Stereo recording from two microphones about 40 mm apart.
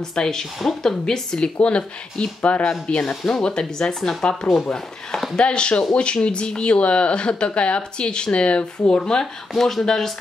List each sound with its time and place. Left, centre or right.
0.1 s speech: centre; by 2.7 s left
3.0 s speech: left
9.2 s speech: centre